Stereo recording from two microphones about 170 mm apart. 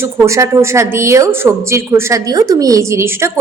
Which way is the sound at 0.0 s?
15° right (ahead or behind).